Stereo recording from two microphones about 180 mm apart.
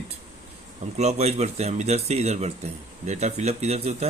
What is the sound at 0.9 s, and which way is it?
Speech, 35° right (ahead or behind).